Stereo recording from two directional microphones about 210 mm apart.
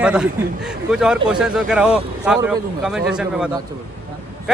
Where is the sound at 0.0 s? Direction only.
5° right (ahead or behind).